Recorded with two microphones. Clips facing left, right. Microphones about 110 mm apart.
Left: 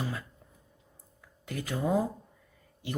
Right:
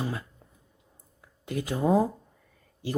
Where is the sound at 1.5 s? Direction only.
25° right (ahead or behind).